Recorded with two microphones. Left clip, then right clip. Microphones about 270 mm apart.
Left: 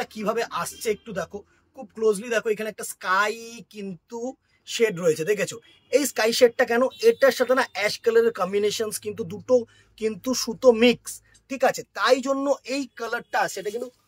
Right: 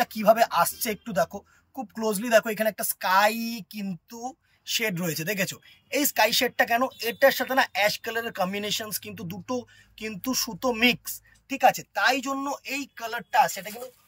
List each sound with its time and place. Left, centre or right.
0.0 s speech: centre